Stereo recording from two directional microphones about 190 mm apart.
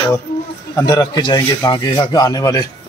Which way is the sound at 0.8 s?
20° left (ahead or behind).